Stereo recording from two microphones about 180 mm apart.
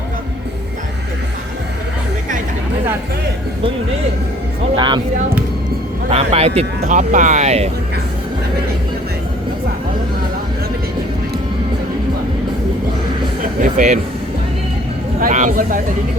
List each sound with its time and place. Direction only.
6.1 s speech: 35° right (ahead or behind)
13.6 s speech: 45° right (ahead or behind)
15.2 s speech: 45° right (ahead or behind)